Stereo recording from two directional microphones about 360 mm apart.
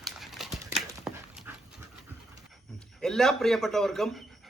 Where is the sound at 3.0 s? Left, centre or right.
Centre.